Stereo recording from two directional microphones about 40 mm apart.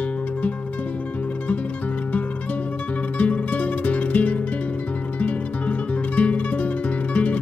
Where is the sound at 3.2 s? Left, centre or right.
Left.